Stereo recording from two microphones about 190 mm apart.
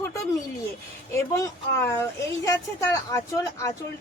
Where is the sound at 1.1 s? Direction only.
15° left (ahead or behind).